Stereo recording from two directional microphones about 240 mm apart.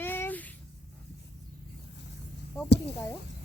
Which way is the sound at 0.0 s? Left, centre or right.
Centre.